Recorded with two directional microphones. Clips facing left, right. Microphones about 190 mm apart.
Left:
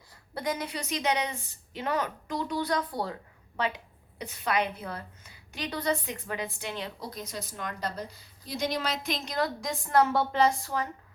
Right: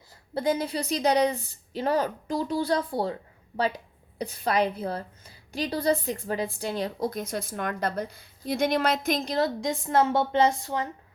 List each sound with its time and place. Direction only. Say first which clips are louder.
0.3 s a woman's voice: right 6 dB; 30° right (ahead or behind)
4.2 s a woman's voice: right 4 dB; 35° right (ahead or behind); by 9.2 s 50° right (ahead or behind)
9.2 s a woman's voice: right 5 dB; 30° right (ahead or behind)